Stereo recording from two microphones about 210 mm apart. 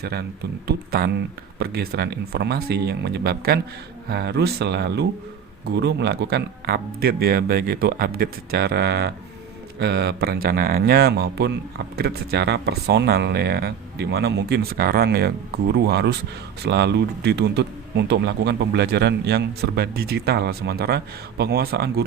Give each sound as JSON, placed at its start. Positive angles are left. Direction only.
{"t": 0.9, "sound": "speech", "side_deg": -45}